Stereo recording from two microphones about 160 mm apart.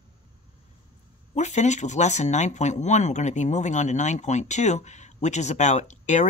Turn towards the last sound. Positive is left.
turn(degrees=50)  # may be behind; listen again after turning